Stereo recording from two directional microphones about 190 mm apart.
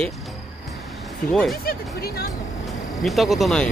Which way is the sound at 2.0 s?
55° left (ahead or behind).